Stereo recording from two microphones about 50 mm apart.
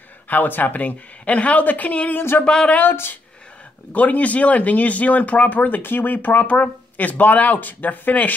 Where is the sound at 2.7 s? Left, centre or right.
Left.